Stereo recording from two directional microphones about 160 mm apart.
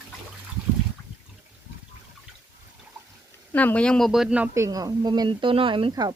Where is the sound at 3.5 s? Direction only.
10° left (ahead or behind).